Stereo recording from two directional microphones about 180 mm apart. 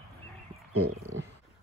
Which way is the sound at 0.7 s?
90° right.